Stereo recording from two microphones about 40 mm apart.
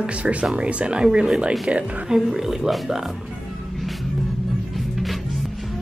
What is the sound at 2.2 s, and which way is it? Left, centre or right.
Speech, centre.